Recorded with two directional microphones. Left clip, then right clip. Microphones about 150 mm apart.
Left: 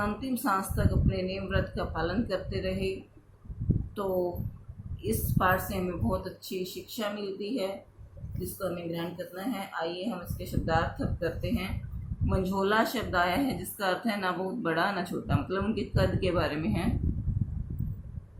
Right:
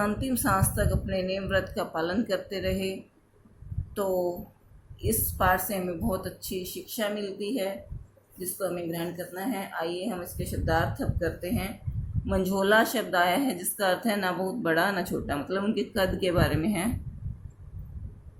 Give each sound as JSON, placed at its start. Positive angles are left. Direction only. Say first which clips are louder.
{"t": 0.0, "sound": "speech", "louder": "right 3 dB", "side_deg": -50}
{"t": 5.0, "sound": "speech", "louder": "right 2 dB", "side_deg": -50}